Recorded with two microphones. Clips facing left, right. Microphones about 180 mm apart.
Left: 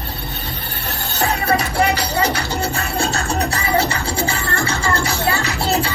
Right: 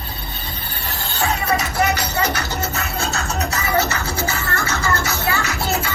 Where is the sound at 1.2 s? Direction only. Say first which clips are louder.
Left 2 dB; 30° left (ahead or behind).